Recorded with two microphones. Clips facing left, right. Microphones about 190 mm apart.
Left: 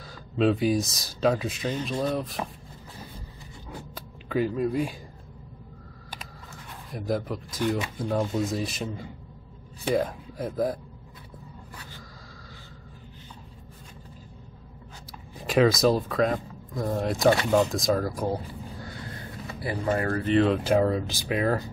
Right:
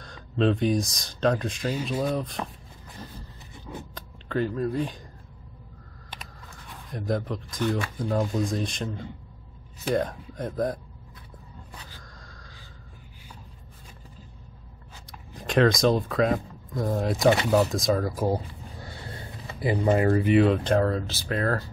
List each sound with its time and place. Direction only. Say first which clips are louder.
0.0 s speech: left 1 dB; 5° left (ahead or behind)
1.7 s speech: right 1 dB; 5° right (ahead or behind)
3.9 s a sound: left 2 dB; 10° left (ahead or behind)
6.7 s speech: even; 5° left (ahead or behind)
15.3 s speech: even; 5° left (ahead or behind)
18.8 s a sound: left 1 dB; 25° right (ahead or behind)
20.3 s speech: left 3 dB; centre (ahead or behind)